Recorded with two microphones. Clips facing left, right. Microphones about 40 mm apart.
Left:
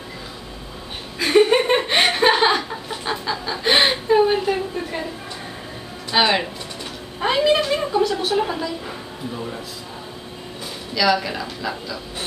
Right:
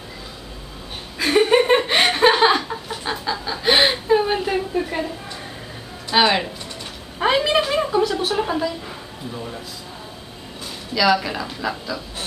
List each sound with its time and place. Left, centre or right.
1.2 s chuckle: centre
6.0 s speech: centre
7.2 s a sound: centre
11.0 s a woman's voice: centre